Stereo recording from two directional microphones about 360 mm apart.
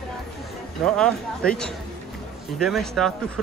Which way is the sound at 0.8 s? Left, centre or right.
Centre.